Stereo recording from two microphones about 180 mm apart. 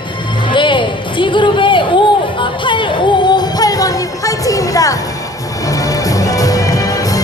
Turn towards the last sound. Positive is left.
turn(degrees=20)  # may be behind; listen again after turning